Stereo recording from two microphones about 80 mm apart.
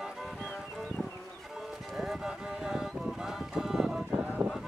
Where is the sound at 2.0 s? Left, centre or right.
Centre.